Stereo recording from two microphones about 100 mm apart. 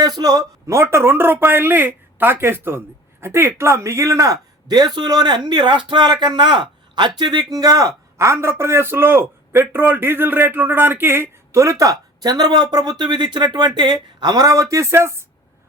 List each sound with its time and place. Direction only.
0.0 s speech: 40° right (ahead or behind)
0.7 s speech: 25° right (ahead or behind)